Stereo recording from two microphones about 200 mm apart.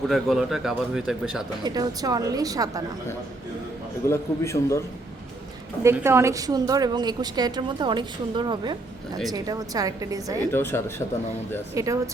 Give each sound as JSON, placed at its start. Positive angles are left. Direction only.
{"t": 0.1, "sound": "speech", "side_deg": 0}
{"t": 1.6, "sound": "a woman's voice", "side_deg": -20}
{"t": 4.1, "sound": "a man's voice", "side_deg": 15}
{"t": 5.8, "sound": "a woman's voice", "side_deg": -10}
{"t": 10.5, "sound": "a man's voice", "side_deg": 10}
{"t": 11.7, "sound": "a woman's voice", "side_deg": -15}